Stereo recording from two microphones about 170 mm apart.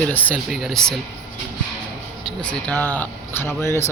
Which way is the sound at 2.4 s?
10° left (ahead or behind).